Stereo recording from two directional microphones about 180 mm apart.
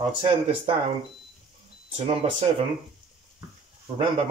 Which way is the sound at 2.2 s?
35° right (ahead or behind).